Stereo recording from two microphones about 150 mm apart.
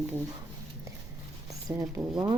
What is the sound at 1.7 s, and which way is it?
Speech, 15° right (ahead or behind).